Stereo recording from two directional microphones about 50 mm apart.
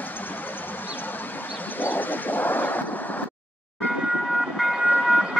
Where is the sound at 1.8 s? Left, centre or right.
Left.